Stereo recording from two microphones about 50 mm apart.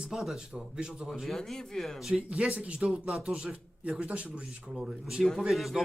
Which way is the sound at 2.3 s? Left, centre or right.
Right.